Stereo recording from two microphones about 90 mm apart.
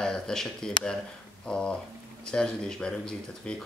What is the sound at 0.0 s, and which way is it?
Speech, 5° left (ahead or behind).